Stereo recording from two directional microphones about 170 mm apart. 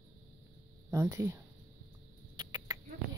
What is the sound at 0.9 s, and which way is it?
Speech, 15° right (ahead or behind).